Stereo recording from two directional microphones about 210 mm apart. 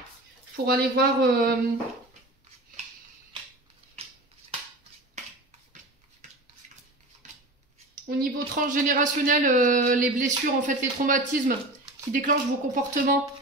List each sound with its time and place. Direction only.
0.7 s speech: 45° right (ahead or behind)
6.2 s dishes: 35° right (ahead or behind)
7.9 s a man's voice: 40° right (ahead or behind)